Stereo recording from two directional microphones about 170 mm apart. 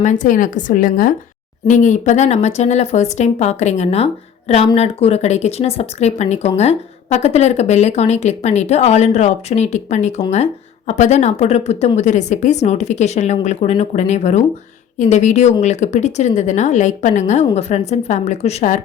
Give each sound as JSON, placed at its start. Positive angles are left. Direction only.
{"t": 0.0, "sound": "a woman's voice", "side_deg": 45}